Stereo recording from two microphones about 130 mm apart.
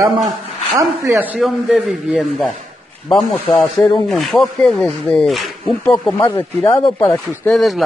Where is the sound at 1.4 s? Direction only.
Centre (ahead or behind).